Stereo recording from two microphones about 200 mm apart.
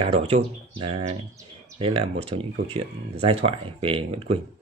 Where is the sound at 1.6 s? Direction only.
25° right (ahead or behind).